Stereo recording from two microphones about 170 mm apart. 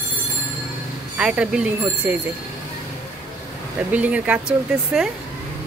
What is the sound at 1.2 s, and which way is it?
Speech, 5° right (ahead or behind).